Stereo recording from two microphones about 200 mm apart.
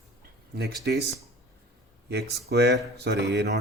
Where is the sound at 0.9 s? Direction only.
60° right (ahead or behind).